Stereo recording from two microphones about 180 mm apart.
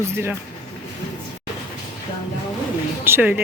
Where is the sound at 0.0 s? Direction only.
15° right (ahead or behind).